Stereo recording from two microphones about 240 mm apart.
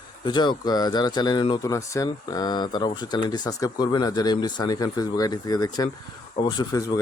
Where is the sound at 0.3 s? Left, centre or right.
Centre.